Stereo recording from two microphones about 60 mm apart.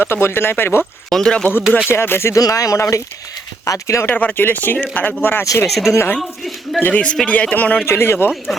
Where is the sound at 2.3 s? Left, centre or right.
Left.